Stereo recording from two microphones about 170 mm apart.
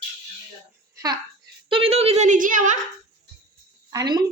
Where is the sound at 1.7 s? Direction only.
35° right (ahead or behind); by 2.7 s 50° right (ahead or behind).